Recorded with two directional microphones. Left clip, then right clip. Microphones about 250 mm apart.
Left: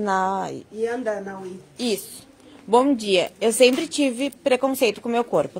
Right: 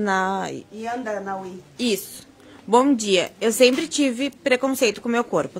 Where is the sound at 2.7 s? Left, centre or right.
Centre.